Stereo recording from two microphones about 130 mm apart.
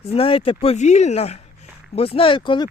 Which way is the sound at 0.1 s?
45° left (ahead or behind).